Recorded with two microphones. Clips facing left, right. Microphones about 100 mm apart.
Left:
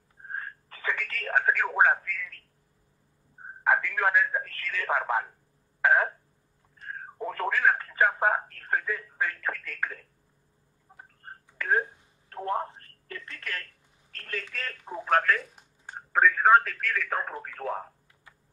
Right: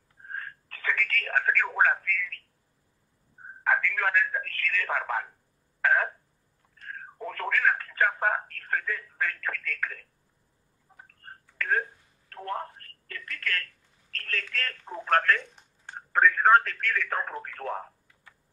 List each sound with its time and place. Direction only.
0.3 s telephone: 15° left (ahead or behind)
1.8 s speech: 15° left (ahead or behind)
3.6 s speech: 15° left (ahead or behind)
5.8 s a sound: 15° left (ahead or behind)
6.8 s speech: 20° left (ahead or behind)
10.9 s frog: 25° left (ahead or behind)
11.4 s telephone: 15° left (ahead or behind)
14.1 s speech: 15° left (ahead or behind)